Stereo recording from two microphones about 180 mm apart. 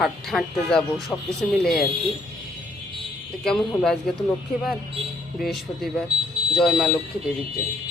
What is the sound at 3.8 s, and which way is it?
Speech, centre (ahead or behind).